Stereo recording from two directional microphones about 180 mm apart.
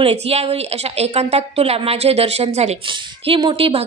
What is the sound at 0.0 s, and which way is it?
A woman's voice, 35° right (ahead or behind).